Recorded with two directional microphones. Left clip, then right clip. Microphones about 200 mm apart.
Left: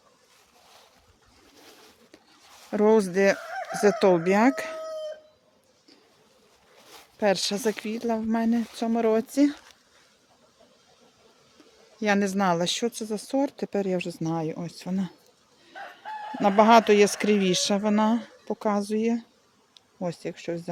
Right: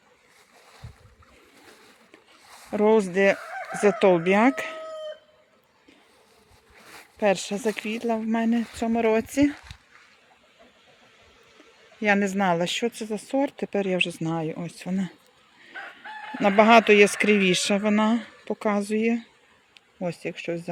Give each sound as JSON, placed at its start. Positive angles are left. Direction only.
{"t": 2.6, "sound": "speech", "side_deg": 10}
{"t": 3.5, "sound": "chicken", "side_deg": -40}
{"t": 3.8, "sound": "speech", "side_deg": 5}
{"t": 6.9, "sound": "speech", "side_deg": 0}
{"t": 11.9, "sound": "speech", "side_deg": 0}
{"t": 16.4, "sound": "speech", "side_deg": 0}